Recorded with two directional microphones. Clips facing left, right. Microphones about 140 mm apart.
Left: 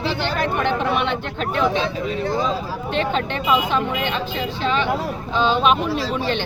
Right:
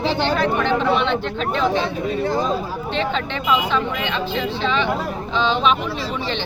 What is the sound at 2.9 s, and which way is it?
Speech, 50° left (ahead or behind).